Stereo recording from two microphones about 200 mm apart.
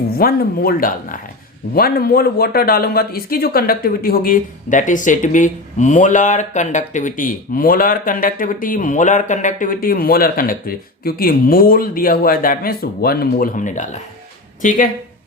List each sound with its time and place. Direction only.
0.2 s speech: 50° left (ahead or behind)